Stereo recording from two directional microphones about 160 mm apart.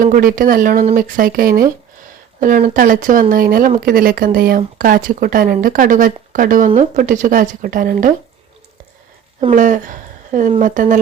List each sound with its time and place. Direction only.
0.0 s speech: 60° right (ahead or behind)
9.5 s speech: 55° right (ahead or behind)